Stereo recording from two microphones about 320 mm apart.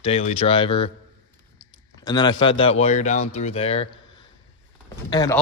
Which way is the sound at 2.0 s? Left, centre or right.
Centre.